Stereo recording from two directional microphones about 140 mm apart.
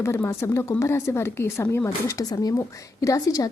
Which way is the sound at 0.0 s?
20° left (ahead or behind).